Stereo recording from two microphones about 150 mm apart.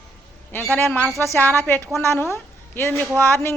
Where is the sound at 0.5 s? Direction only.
10° left (ahead or behind).